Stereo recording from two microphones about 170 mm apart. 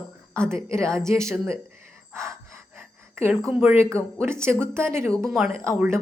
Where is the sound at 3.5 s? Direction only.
15° right (ahead or behind).